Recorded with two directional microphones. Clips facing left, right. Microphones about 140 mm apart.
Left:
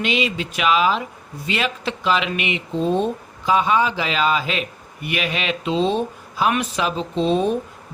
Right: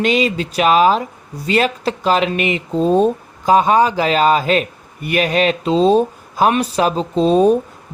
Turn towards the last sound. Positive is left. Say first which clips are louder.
# right 7 dB
turn(degrees=-40)  # may be behind; listen again after turning